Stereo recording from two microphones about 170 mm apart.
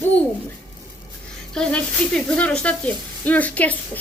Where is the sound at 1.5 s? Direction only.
5° left (ahead or behind).